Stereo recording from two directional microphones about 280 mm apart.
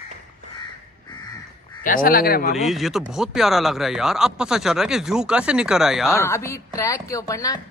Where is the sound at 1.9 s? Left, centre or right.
Left.